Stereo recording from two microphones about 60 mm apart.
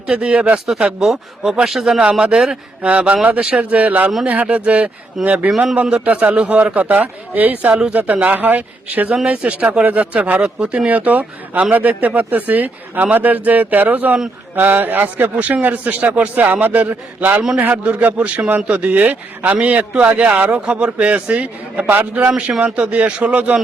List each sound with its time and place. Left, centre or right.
0.1 s a man's voice: centre
2.9 s a man's voice: right
5.5 s speech: centre
5.7 s a man's voice: right